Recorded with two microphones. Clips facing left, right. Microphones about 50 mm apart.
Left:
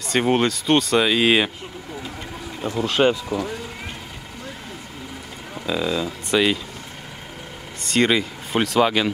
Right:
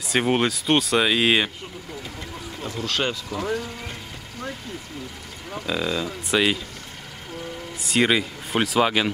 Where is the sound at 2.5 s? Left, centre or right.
Centre.